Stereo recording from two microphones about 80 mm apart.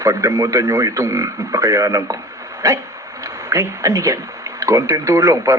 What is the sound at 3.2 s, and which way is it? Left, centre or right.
A man's voice, right.